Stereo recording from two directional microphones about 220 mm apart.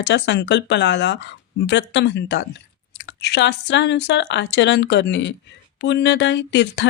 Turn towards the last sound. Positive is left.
turn(degrees=50)  # may be behind; listen again after turning